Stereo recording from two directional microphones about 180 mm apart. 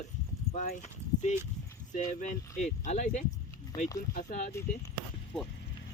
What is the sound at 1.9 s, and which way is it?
Speech, 45° left (ahead or behind).